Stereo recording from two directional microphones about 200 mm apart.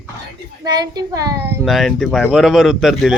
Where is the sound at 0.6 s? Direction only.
20° right (ahead or behind).